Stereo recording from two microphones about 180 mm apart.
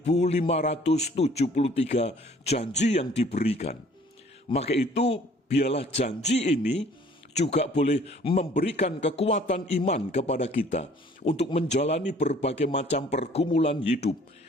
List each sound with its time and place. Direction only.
0.0 s a man's voice: 35° left (ahead or behind)